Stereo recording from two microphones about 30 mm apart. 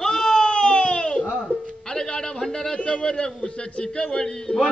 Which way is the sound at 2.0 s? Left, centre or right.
Centre.